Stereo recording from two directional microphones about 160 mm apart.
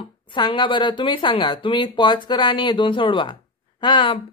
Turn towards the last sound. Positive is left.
turn(degrees=30)  # may be behind; listen again after turning